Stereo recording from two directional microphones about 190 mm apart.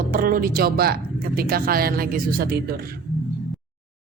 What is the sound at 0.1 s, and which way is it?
Speech, 50° right (ahead or behind).